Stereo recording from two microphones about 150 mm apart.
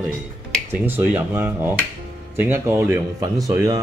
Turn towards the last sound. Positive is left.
turn(degrees=-25)  # may be behind; listen again after turning